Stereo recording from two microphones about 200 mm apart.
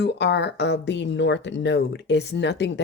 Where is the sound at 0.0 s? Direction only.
55° left (ahead or behind).